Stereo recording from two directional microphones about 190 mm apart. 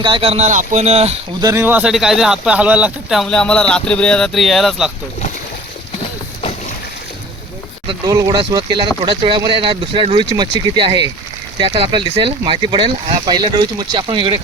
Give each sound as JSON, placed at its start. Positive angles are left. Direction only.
{"t": 0.0, "sound": "speech", "side_deg": -30}
{"t": 1.4, "sound": "speech", "side_deg": -15}
{"t": 7.9, "sound": "speech", "side_deg": -20}